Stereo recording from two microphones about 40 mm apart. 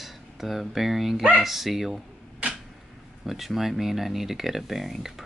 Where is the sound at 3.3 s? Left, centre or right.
Centre.